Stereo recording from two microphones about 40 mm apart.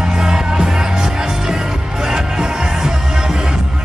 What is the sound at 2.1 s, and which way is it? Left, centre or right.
Music, centre.